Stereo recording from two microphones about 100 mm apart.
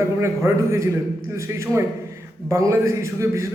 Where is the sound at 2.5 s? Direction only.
30° right (ahead or behind).